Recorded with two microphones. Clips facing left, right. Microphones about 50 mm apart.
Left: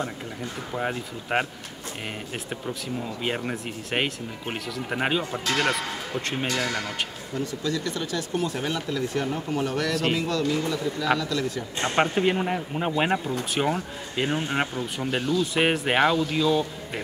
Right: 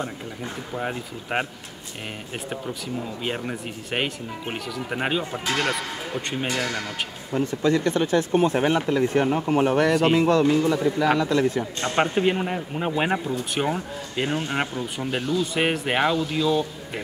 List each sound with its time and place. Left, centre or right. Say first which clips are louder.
0.7 s speech: left 1 dB; centre
2.5 s speech: right 1 dB; centre
7.3 s a man's voice: right 7 dB; right
12.0 s speech: right 1 dB; centre